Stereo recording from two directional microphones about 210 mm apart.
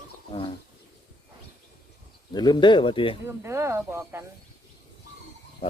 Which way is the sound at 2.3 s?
20° left (ahead or behind).